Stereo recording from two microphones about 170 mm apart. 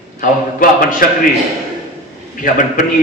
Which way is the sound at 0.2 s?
55° left (ahead or behind).